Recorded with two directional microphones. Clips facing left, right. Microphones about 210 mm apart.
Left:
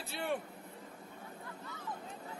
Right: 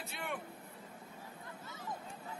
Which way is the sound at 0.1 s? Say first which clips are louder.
Left 7 dB; 35° left (ahead or behind).